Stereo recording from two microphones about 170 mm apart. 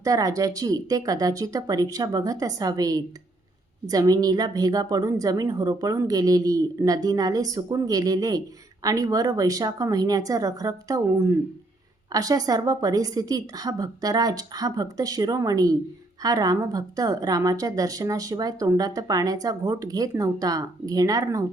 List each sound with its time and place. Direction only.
0.0 s a woman's voice: 20° right (ahead or behind)